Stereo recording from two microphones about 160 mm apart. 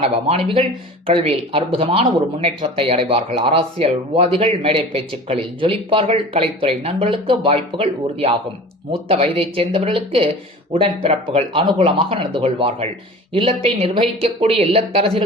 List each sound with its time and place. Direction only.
0.0 s a man's voice: 40° right (ahead or behind)